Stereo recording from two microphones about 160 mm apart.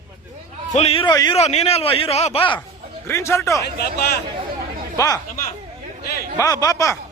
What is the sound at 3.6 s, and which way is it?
Speech, 75° left (ahead or behind).